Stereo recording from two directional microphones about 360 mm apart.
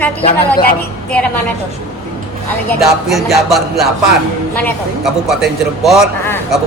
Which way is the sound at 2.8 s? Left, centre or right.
Centre.